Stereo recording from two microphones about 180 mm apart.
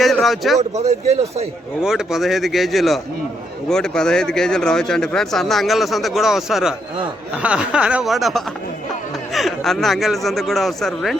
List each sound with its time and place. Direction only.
0.0 s a sound: centre (ahead or behind)
0.7 s speech: 40° right (ahead or behind)
1.8 s speech: 5° right (ahead or behind)